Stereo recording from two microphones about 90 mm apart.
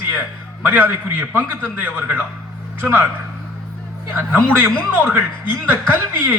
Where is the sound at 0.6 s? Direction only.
20° right (ahead or behind).